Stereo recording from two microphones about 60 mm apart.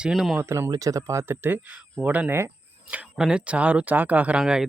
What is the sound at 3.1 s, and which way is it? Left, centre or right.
Speech, centre.